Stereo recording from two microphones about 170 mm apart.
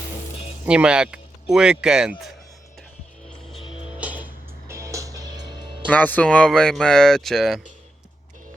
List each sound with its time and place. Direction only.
0.6 s speech: 5° right (ahead or behind)
3.6 s music: 30° left (ahead or behind)
3.9 s music: 10° right (ahead or behind); by 5.7 s 25° right (ahead or behind)
5.9 s speech: 10° left (ahead or behind)